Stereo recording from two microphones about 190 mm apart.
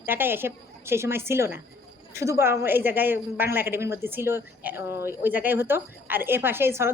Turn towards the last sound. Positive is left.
turn(degrees=-10)  # may be behind; listen again after turning